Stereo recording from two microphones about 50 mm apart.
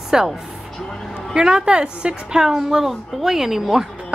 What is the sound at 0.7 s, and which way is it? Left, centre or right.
Vehicle, centre.